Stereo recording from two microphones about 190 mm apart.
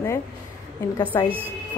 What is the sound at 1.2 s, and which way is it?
Speech, 10° right (ahead or behind).